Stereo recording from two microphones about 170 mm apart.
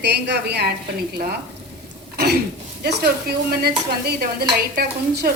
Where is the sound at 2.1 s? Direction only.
70° right (ahead or behind).